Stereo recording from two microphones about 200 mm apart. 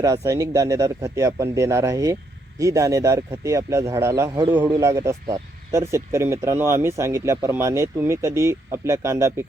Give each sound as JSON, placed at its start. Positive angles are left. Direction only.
{"t": 0.0, "sound": "speech", "side_deg": -15}